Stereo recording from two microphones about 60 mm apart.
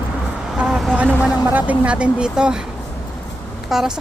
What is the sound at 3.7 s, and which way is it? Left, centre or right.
Speech, centre.